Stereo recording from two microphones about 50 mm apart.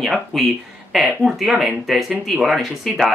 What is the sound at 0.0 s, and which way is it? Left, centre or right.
Speech, centre.